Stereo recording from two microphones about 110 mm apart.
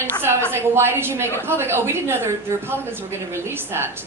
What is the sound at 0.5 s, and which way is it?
A woman's voice, 20° right (ahead or behind).